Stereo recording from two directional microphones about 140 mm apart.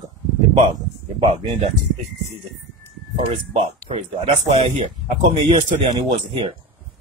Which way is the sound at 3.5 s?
55° right (ahead or behind).